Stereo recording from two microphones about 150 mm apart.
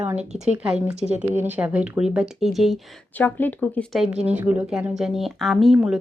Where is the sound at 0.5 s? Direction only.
5° right (ahead or behind).